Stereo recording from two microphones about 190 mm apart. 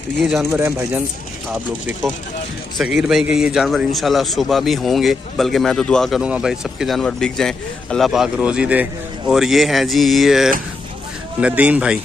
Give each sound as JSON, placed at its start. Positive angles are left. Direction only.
{"t": 0.2, "sound": "a man's voice", "side_deg": 0}
{"t": 0.6, "sound": "speech", "side_deg": -15}
{"t": 2.8, "sound": "a man's voice", "side_deg": -5}